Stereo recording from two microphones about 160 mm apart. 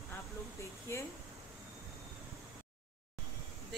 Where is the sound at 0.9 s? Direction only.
15° left (ahead or behind).